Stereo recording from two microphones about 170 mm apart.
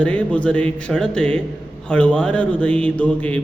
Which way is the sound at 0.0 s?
5° left (ahead or behind).